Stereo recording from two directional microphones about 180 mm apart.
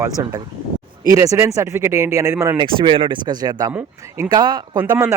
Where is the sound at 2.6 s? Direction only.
25° right (ahead or behind).